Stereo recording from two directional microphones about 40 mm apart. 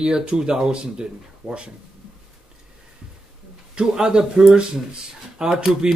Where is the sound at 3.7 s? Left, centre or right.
Centre.